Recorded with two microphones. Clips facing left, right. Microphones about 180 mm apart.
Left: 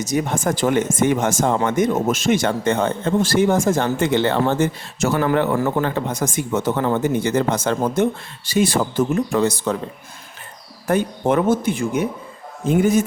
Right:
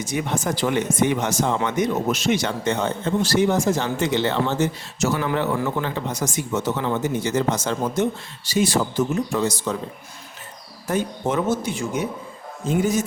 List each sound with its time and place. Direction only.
0.0 s speech: 40° left (ahead or behind); by 9.7 s 60° left (ahead or behind)
10.8 s speech: 60° left (ahead or behind)